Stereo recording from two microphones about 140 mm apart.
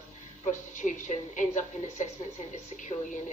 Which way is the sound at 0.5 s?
60° left (ahead or behind).